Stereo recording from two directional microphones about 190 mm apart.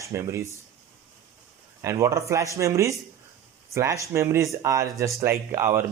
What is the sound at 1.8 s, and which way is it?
Speech, 15° right (ahead or behind).